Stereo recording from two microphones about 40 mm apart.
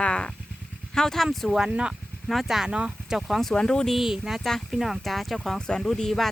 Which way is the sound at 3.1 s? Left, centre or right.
Centre.